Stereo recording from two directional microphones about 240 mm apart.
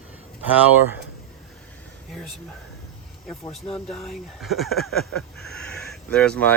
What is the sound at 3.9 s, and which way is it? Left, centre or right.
Speech, centre.